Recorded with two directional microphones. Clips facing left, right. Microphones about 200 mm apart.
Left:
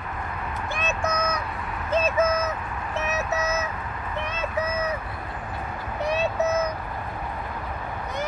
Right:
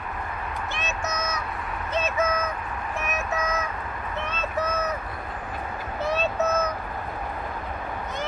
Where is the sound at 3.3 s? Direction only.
25° left (ahead or behind).